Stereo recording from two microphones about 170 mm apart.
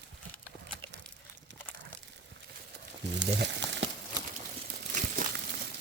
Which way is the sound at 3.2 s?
90° right.